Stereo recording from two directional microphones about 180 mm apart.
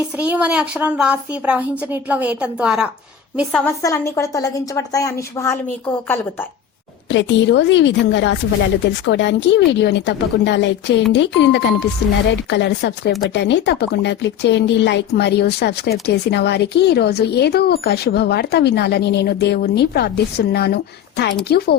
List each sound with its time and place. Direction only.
0.2 s a woman's voice: 5° right (ahead or behind)
3.7 s a woman's voice: 15° left (ahead or behind)
7.1 s a woman's voice: 85° left; by 21.8 s 65° left (ahead or behind)